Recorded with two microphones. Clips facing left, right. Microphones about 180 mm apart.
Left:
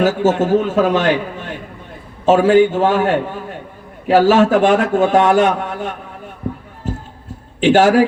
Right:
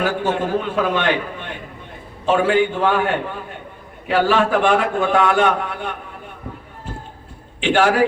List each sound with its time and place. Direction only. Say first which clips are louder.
0.0 s a man's voice: left 6 dB; 45° left (ahead or behind)
2.2 s a man's voice: left 6 dB; 40° left (ahead or behind)
4.1 s a man's voice: left 6 dB; 45° left (ahead or behind)
7.6 s a man's voice: left 6 dB; 40° left (ahead or behind)